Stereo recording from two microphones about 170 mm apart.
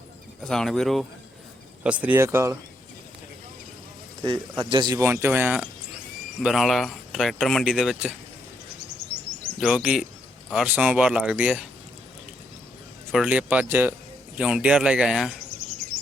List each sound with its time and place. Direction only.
0.4 s speech: 5° left (ahead or behind); by 2.6 s 15° right (ahead or behind)
4.2 s speech: 25° right (ahead or behind)
6.4 s speech: centre (ahead or behind)
9.0 s a sound: 75° right (ahead or behind)
9.6 s speech: centre (ahead or behind)
13.1 s speech: 5° right (ahead or behind)